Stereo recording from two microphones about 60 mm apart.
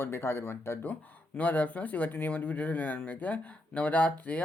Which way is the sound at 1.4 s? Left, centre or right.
Left.